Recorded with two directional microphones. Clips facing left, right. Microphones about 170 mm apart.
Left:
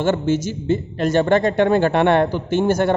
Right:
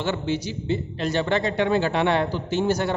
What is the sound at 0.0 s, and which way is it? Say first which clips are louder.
Speech: left 7 dB; 50° left (ahead or behind).